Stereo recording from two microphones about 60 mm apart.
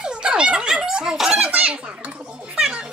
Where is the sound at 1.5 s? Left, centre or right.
Right.